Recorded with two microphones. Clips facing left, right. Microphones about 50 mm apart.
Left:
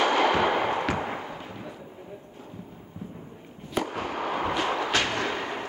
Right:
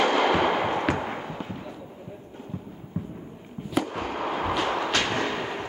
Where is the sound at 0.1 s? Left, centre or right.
Centre.